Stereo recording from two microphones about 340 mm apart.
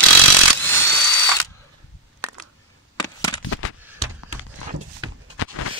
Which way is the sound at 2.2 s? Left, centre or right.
Centre.